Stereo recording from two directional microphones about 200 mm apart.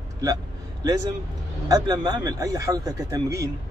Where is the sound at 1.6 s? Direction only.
20° right (ahead or behind).